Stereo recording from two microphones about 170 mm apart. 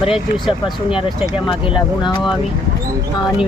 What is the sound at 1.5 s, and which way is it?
Speech, 30° left (ahead or behind).